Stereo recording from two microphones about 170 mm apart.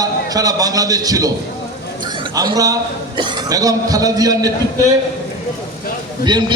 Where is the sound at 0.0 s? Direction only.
20° right (ahead or behind).